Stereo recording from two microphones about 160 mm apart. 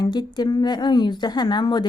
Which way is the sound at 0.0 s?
25° left (ahead or behind).